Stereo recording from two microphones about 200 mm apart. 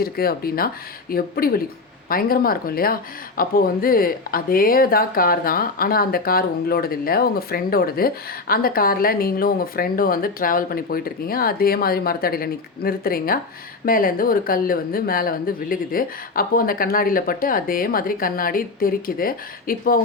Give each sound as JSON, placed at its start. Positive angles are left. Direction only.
{"t": 0.0, "sound": "speech", "side_deg": 50}